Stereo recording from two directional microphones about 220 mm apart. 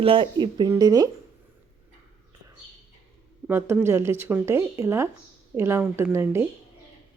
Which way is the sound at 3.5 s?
10° right (ahead or behind).